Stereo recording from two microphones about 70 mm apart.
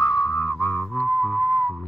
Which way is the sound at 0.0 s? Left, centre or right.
Left.